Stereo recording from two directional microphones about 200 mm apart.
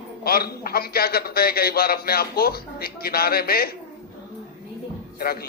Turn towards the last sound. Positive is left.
turn(degrees=50)  # may be behind; listen again after turning